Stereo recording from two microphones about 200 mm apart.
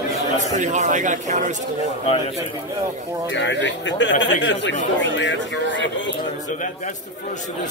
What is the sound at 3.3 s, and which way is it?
Speech, 65° left (ahead or behind).